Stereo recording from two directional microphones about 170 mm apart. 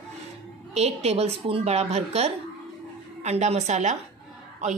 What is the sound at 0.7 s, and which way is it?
Speech, 40° right (ahead or behind).